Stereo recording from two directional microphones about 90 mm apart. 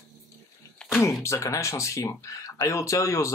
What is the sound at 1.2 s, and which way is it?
Speech, 35° left (ahead or behind).